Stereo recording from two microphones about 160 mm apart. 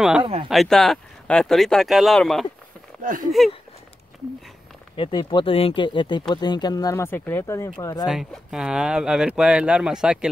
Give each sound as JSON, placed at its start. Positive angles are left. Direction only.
{"t": 0.2, "sound": "speech", "side_deg": -30}
{"t": 0.5, "sound": "speech", "side_deg": 0}
{"t": 3.0, "sound": "speech", "side_deg": -55}
{"t": 3.3, "sound": "speech", "side_deg": 0}
{"t": 4.9, "sound": "speech", "side_deg": 30}
{"t": 8.1, "sound": "speech", "side_deg": -5}